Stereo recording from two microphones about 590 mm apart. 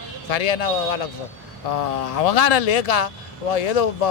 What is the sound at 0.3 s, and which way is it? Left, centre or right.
Speech, left.